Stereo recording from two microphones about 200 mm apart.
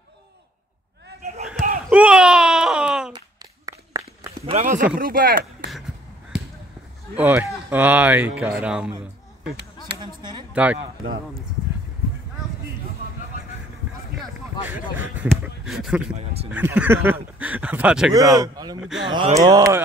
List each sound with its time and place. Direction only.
1.9 s wail: 5° right (ahead or behind)
3.1 s a sound: 20° right (ahead or behind)
4.5 s speech: 35° right (ahead or behind)
7.2 s speech: 10° right (ahead or behind)
10.5 s speech: 5° right (ahead or behind)
14.1 s vehicle: 5° right (ahead or behind)
15.1 s speech: 5° right (ahead or behind)
18.3 s speech: 20° right (ahead or behind)
18.8 s speech: 5° right (ahead or behind)
19.0 s speech: 25° right (ahead or behind)